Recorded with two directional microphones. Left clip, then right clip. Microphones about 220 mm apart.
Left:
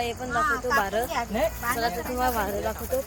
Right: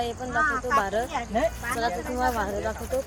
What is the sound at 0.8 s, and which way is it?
Speech, centre (ahead or behind).